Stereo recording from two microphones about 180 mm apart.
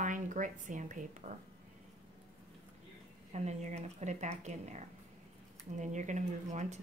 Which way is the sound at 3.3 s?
40° right (ahead or behind).